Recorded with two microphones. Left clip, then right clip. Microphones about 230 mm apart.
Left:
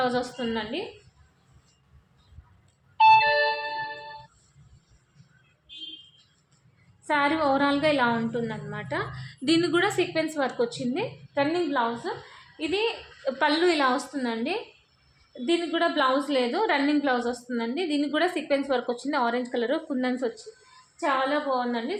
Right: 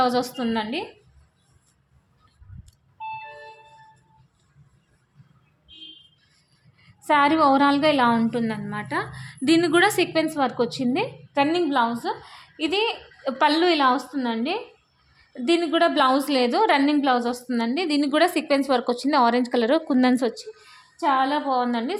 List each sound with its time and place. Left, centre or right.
0.0 s a woman's voice: right
3.0 s music: left
7.0 s a woman's voice: right
15.4 s a woman's voice: right